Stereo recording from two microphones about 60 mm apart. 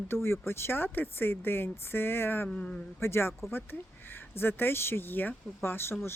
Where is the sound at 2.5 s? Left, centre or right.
Centre.